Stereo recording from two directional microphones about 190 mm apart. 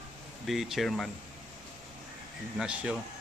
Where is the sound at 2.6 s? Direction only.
5° right (ahead or behind).